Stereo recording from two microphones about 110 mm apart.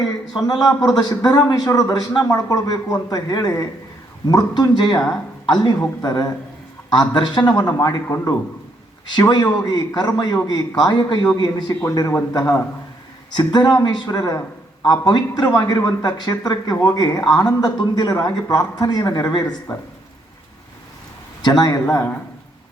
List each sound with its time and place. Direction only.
0.0 s speech: 40° left (ahead or behind)
9.0 s speech: 40° left (ahead or behind)
21.6 s speech: 35° left (ahead or behind)